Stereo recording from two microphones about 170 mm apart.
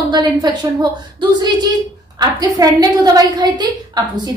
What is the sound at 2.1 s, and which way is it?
A woman's voice, 20° right (ahead or behind).